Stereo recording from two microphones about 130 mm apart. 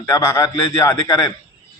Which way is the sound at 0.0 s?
25° left (ahead or behind).